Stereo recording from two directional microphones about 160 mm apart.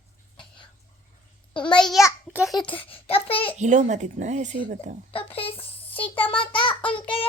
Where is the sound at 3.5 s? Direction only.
45° right (ahead or behind).